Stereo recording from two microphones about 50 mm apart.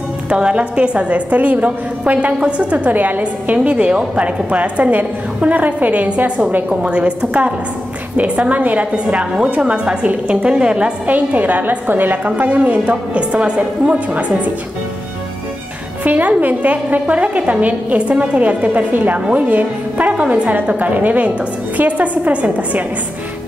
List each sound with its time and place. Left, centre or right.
0.3 s a woman's voice: right
11.1 s a woman's voice: right
16.0 s a woman's voice: right